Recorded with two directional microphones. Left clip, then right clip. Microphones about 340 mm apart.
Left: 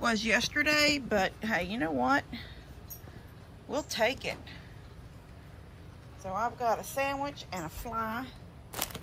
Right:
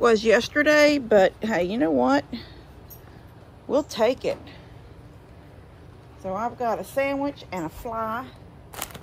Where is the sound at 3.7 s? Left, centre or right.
Centre.